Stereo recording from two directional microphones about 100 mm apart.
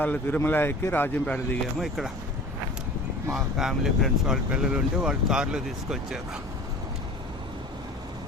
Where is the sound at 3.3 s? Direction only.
5° right (ahead or behind).